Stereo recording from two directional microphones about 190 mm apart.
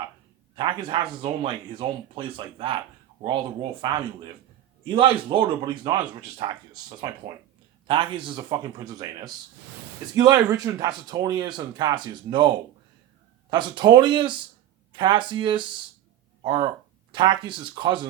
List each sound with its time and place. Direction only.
0.5 s speech: 25° right (ahead or behind)